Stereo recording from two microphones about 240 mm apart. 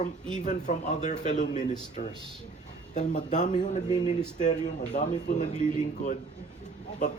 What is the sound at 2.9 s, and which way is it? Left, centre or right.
Speech, left.